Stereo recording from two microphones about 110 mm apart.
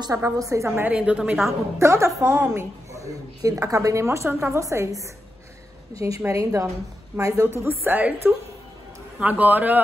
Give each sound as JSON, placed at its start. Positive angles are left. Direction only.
{"t": 0.0, "sound": "a woman's voice", "side_deg": -30}
{"t": 0.8, "sound": "a man's voice", "side_deg": -10}
{"t": 1.8, "sound": "a woman's voice", "side_deg": -25}